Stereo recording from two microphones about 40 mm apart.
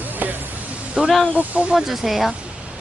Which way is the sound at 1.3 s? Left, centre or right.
Right.